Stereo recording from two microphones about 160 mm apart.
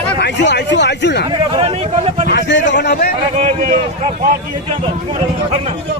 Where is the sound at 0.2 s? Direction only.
90° left.